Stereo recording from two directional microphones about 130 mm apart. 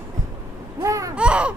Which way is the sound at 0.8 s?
25° right (ahead or behind).